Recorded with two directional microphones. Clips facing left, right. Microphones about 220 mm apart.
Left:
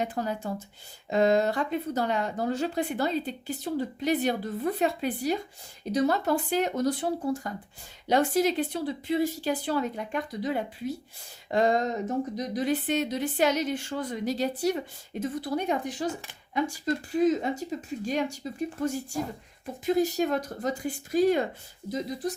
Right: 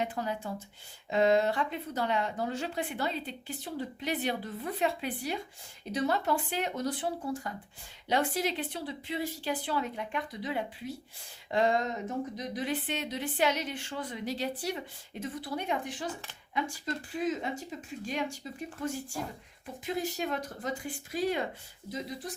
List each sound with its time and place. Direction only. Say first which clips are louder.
0.0 s speech: left 3 dB; 40° left (ahead or behind)
19.8 s speech: left 9 dB; 40° left (ahead or behind)